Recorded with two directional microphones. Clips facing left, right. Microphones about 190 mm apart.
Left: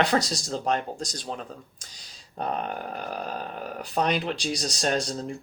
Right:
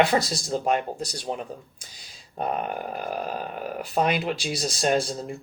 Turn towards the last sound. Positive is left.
turn(degrees=-5)  # may be behind; listen again after turning